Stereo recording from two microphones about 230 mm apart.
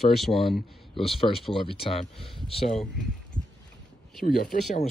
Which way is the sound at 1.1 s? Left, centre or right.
Left.